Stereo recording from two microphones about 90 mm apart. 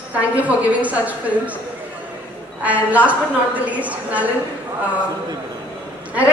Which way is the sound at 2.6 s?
15° right (ahead or behind).